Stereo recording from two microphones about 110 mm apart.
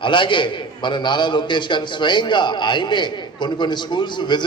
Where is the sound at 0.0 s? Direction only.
50° left (ahead or behind).